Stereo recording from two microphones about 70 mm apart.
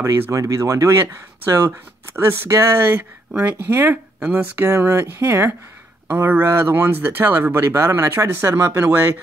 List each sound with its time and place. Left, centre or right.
0.0 s speech: right
2.9 s speech: right
4.2 s speech: centre
4.6 s speech: right